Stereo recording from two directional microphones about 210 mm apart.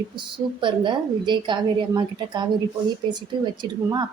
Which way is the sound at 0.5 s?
20° right (ahead or behind).